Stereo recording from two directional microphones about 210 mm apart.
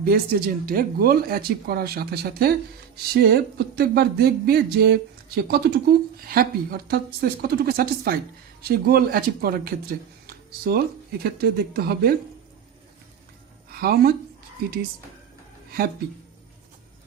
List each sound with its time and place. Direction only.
0.0 s speech: 45° right (ahead or behind)
13.7 s speech: 45° right (ahead or behind)